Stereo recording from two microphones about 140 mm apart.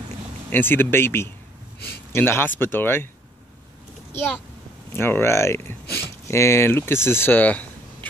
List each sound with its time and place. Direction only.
0.5 s speech: 15° left (ahead or behind)
4.9 s speech: 15° left (ahead or behind)
7.1 s a sound: 15° left (ahead or behind)